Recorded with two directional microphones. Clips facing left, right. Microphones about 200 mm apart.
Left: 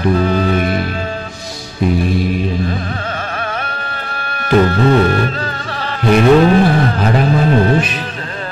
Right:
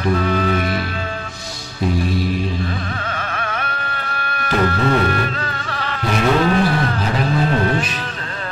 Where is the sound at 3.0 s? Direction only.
35° left (ahead or behind).